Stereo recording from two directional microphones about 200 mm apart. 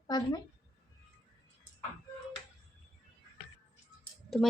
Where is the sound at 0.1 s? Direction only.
20° left (ahead or behind).